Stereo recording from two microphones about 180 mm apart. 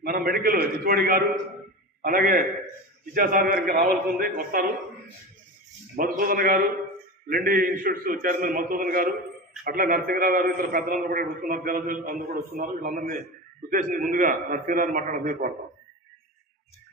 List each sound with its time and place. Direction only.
0.0 s a sound: 55° right (ahead or behind)
2.0 s a man's voice: 50° right (ahead or behind)
5.9 s a man's voice: 50° right (ahead or behind)